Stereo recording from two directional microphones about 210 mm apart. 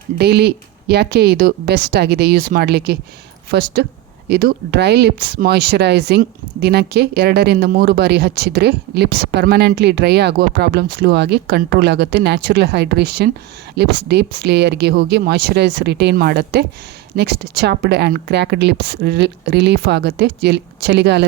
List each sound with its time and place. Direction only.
0.2 s speech: 50° right (ahead or behind)